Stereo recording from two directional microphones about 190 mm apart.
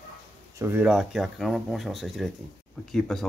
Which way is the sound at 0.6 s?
10° right (ahead or behind).